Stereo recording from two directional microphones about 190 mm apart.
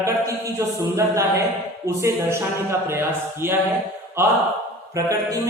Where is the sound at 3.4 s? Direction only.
10° right (ahead or behind).